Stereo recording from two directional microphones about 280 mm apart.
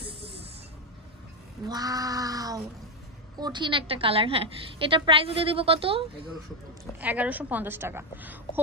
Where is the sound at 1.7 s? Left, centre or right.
Centre.